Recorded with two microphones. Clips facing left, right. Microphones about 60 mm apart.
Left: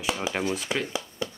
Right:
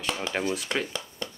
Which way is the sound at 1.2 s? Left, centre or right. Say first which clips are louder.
Left 5 dB; centre.